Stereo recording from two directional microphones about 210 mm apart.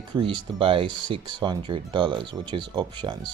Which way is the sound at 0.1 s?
20° right (ahead or behind).